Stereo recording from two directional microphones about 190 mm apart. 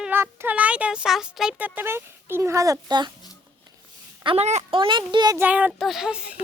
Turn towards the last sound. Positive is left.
turn(degrees=0)  # may be behind; listen again after turning